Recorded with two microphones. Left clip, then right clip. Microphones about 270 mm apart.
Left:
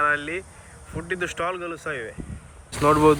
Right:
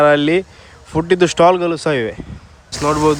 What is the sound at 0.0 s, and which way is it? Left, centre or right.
Speech, centre.